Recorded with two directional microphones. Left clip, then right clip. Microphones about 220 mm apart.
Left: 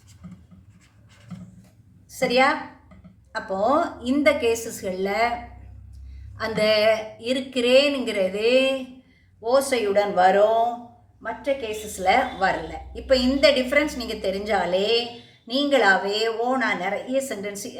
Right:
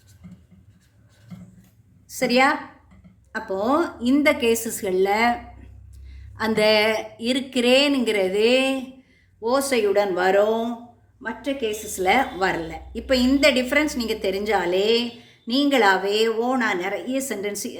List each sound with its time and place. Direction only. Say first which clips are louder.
2.1 s a woman's voice: right 1 dB; 50° right (ahead or behind)
6.3 s a woman's voice: right 2 dB; 55° right (ahead or behind)
11.4 s a woman's voice: even; 50° right (ahead or behind)